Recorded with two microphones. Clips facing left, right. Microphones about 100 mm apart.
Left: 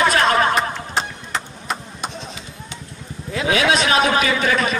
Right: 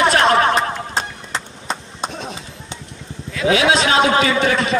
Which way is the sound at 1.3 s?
30° right (ahead or behind).